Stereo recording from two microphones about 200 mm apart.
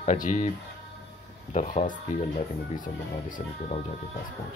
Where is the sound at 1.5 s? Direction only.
35° left (ahead or behind).